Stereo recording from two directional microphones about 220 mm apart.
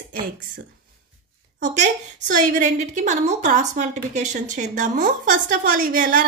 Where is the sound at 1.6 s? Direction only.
35° right (ahead or behind).